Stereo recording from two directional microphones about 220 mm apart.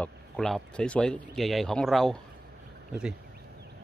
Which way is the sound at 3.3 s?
45° right (ahead or behind).